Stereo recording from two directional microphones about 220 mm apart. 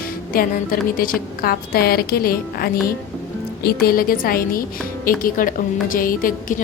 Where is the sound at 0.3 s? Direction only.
40° left (ahead or behind).